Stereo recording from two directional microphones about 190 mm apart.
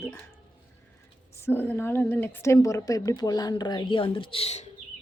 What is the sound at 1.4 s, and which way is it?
A woman's voice, 10° left (ahead or behind).